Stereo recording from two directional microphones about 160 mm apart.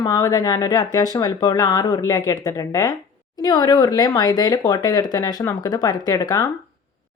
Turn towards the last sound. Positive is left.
turn(degrees=25)  # may be behind; listen again after turning